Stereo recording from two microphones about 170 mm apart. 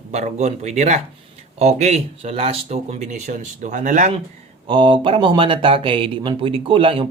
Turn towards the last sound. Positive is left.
turn(degrees=-30)  # may be behind; listen again after turning